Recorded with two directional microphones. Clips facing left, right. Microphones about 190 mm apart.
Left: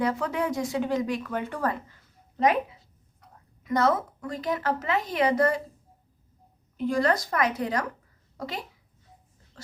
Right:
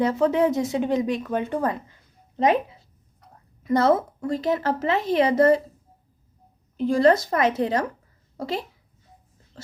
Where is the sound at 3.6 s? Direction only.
30° right (ahead or behind).